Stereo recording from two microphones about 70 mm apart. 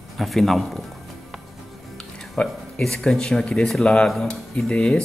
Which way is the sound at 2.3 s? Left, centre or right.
Centre.